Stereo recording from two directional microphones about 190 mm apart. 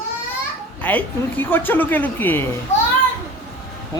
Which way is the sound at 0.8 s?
10° left (ahead or behind).